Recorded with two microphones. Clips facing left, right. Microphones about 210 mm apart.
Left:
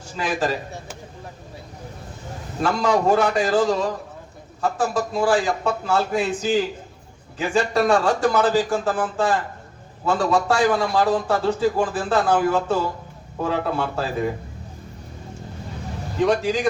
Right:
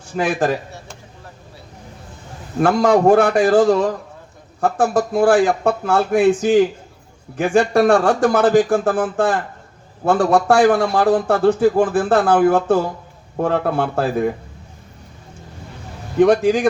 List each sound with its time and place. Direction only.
0.2 s a man's voice: 50° right (ahead or behind)
2.6 s a man's voice: 55° right (ahead or behind)
16.2 s a man's voice: 55° right (ahead or behind)